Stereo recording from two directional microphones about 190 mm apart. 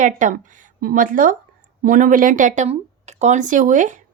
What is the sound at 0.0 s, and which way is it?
Speech, 40° right (ahead or behind).